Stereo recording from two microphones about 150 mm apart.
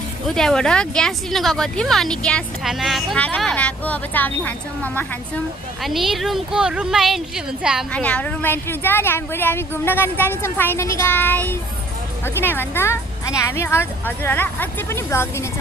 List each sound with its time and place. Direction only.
0.3 s speech: 5° left (ahead or behind)
5.8 s speech: centre (ahead or behind)
7.9 s speech: 10° left (ahead or behind)